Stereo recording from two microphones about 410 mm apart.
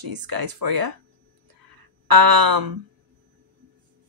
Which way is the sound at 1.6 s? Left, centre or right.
Right.